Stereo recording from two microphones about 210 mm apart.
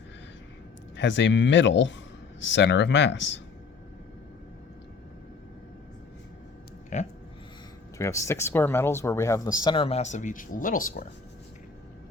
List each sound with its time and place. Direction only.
0.9 s speech: 55° left (ahead or behind)
6.9 s a sound: 35° left (ahead or behind)
7.9 s speech: 15° left (ahead or behind); by 11.0 s 40° left (ahead or behind)